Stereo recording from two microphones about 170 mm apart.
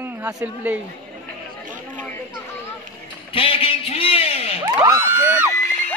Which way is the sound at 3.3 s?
35° left (ahead or behind).